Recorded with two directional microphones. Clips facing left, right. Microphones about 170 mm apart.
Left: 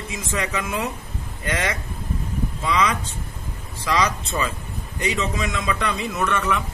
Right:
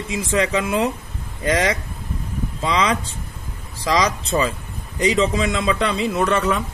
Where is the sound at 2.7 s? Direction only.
30° right (ahead or behind).